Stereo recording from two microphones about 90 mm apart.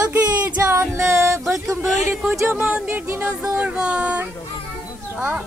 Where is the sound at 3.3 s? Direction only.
15° right (ahead or behind).